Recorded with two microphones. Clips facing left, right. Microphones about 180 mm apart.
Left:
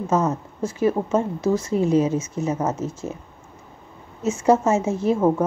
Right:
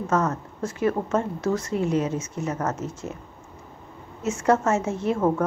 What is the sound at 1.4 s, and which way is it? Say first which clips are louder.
Speech: left 4 dB; centre (ahead or behind).